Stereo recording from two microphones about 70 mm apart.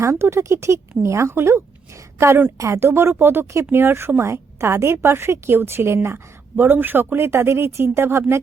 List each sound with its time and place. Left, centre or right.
0.0 s a woman's voice: right